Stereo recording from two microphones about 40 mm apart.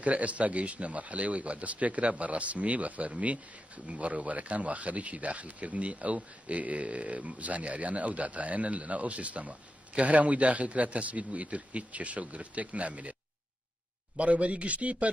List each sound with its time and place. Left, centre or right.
0.0 s a man's voice: right
14.1 s a man's voice: right